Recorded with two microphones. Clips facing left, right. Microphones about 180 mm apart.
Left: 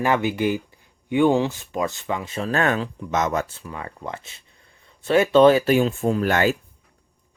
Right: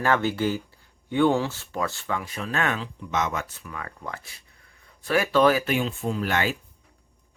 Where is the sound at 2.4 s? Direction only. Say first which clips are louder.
Left 7 dB; 35° left (ahead or behind).